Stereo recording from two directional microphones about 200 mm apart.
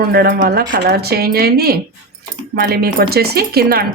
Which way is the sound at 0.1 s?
50° right (ahead or behind).